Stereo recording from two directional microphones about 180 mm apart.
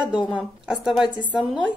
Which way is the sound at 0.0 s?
5° right (ahead or behind).